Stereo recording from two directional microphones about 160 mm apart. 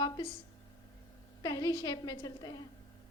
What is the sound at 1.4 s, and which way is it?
A woman's voice, 20° left (ahead or behind).